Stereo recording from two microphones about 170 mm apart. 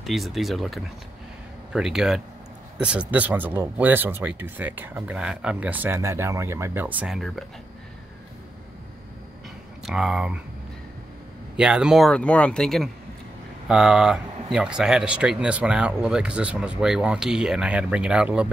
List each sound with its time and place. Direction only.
0.0 s speech: centre (ahead or behind)
9.8 s speech: 5° right (ahead or behind)
11.5 s speech: 5° right (ahead or behind)